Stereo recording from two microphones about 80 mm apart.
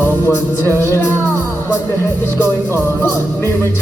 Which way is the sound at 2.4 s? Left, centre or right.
Left.